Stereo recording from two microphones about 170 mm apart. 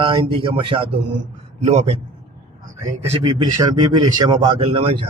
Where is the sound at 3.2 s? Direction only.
25° right (ahead or behind).